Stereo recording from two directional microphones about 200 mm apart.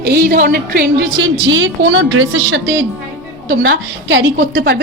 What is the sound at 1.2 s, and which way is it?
A woman's voice, 65° right (ahead or behind).